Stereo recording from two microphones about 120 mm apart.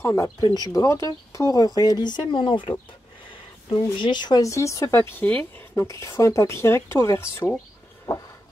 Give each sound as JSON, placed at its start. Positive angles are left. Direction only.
{"t": 0.0, "sound": "speech", "side_deg": 25}
{"t": 4.0, "sound": "speech", "side_deg": 40}
{"t": 5.9, "sound": "speech", "side_deg": 25}